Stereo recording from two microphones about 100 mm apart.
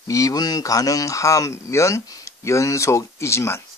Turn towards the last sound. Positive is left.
turn(degrees=25)  # may be behind; listen again after turning